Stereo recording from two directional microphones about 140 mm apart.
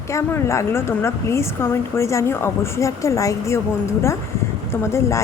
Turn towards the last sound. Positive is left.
turn(degrees=20)  # may be behind; listen again after turning